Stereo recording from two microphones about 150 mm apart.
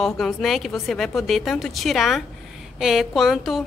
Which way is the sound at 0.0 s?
Centre (ahead or behind).